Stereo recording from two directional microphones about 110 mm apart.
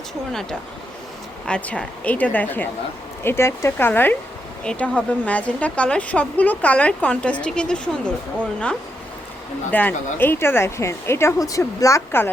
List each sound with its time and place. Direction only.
1.5 s speech: 10° left (ahead or behind)
9.7 s speech: 15° left (ahead or behind)